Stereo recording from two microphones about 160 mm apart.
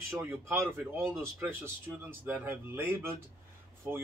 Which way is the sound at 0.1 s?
15° right (ahead or behind).